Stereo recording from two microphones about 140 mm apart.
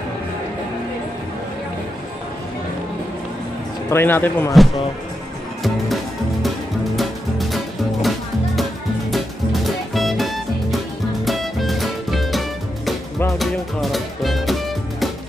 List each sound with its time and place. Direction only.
3.9 s speech: 15° left (ahead or behind)
7.0 s music: centre (ahead or behind)
9.1 s music: centre (ahead or behind)